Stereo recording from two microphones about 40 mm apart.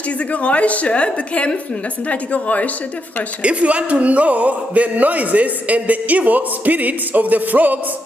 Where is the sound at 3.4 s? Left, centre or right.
Right.